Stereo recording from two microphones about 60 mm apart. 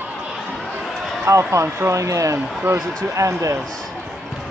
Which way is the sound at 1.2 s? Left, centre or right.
Right.